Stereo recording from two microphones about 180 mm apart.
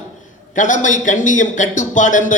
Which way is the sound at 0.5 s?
45° left (ahead or behind).